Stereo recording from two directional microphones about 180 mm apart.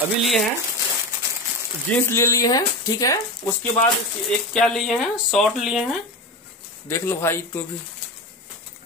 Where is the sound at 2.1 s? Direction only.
15° left (ahead or behind).